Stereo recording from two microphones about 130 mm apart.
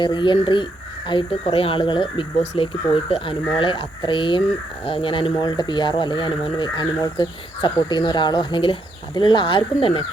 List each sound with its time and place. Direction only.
0.0 s speech: 35° left (ahead or behind)